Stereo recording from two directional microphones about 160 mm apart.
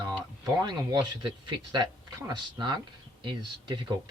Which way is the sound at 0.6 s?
25° right (ahead or behind).